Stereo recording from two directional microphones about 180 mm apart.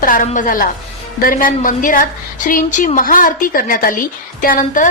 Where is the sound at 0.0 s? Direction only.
50° left (ahead or behind).